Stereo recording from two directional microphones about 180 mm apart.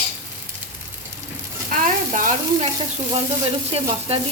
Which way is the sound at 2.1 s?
45° right (ahead or behind).